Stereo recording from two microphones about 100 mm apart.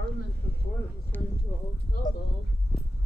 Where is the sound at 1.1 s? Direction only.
20° left (ahead or behind).